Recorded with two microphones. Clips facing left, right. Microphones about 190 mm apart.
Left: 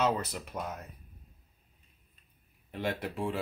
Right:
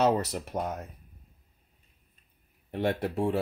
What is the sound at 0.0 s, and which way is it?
Speech, 45° right (ahead or behind).